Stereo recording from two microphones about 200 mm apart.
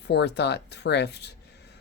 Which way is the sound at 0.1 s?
60° left (ahead or behind).